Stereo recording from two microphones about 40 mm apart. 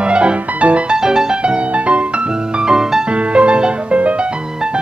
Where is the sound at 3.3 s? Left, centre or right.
Right.